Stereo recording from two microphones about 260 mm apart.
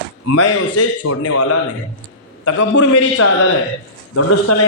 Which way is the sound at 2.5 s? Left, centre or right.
Left.